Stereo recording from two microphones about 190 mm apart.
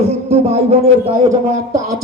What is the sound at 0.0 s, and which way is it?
Speech, 35° right (ahead or behind).